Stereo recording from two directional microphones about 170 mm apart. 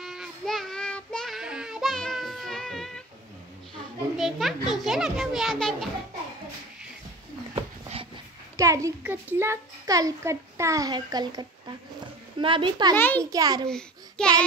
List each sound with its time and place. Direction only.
0.0 s child singing: centre (ahead or behind)
4.2 s a child's voice: centre (ahead or behind)
7.5 s dog: 30° right (ahead or behind)
8.5 s a child's voice: 20° right (ahead or behind)
12.9 s a child's voice: 10° left (ahead or behind)
13.2 s a child's voice: 20° right (ahead or behind)
13.7 s babbling: 5° left (ahead or behind)